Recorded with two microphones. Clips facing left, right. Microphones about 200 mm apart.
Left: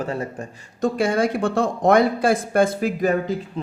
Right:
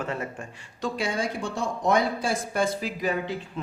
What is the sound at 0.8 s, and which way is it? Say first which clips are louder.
A man's voice: left 9 dB; 50° left (ahead or behind).